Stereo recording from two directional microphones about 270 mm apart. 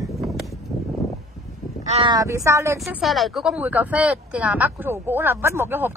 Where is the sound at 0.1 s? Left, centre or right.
Centre.